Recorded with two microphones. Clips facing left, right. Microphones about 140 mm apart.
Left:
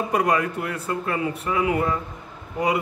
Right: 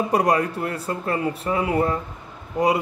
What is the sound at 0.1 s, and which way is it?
A man's voice, 35° right (ahead or behind).